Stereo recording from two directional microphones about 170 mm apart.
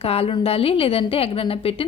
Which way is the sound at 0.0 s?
35° left (ahead or behind).